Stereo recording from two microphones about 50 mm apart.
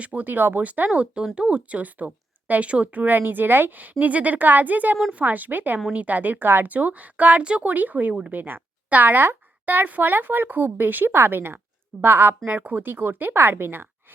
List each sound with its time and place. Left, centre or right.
0.0 s speech: right
0.6 s speech: right
0.9 s speech: right
3.2 s speech: right
12.5 s speech: right